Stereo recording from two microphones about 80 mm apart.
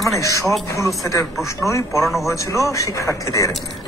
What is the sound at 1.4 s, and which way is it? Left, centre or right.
Speech, left.